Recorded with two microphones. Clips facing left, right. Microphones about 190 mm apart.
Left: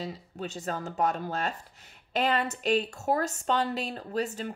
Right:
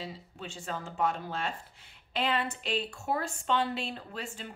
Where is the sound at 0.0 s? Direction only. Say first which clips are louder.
Left 5 dB; 40° left (ahead or behind).